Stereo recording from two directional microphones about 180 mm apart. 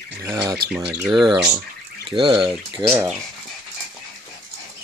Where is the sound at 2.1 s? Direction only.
30° right (ahead or behind).